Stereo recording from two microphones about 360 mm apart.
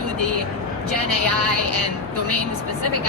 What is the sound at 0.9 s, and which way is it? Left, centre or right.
Speech, right.